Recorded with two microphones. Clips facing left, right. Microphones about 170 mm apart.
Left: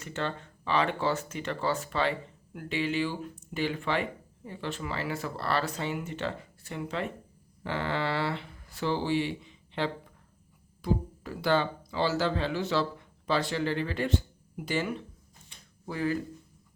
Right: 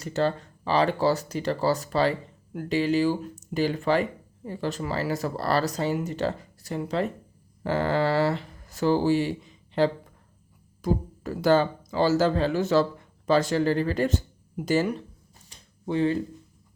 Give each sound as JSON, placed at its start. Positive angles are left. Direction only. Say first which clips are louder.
{"t": 0.0, "sound": "speech", "louder": "right 8 dB", "side_deg": -35}
{"t": 15.5, "sound": "a sound", "louder": "right 3 dB", "side_deg": -40}
{"t": 15.9, "sound": "speech", "louder": "right 6 dB", "side_deg": -25}